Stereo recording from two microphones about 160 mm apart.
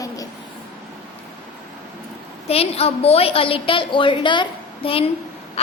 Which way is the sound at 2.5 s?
40° left (ahead or behind).